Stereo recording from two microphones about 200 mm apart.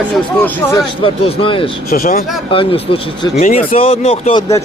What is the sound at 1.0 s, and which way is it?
Speech, 25° left (ahead or behind).